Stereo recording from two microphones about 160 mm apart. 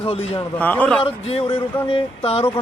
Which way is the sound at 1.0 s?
35° left (ahead or behind).